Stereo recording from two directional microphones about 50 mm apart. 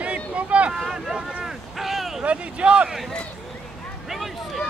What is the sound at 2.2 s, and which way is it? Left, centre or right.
Speech, right.